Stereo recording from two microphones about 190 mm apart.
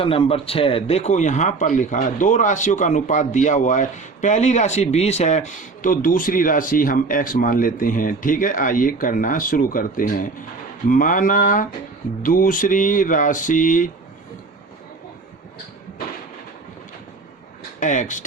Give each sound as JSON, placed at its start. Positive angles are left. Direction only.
{"t": 0.0, "sound": "a man's voice", "side_deg": 30}
{"t": 17.7, "sound": "a man's voice", "side_deg": 40}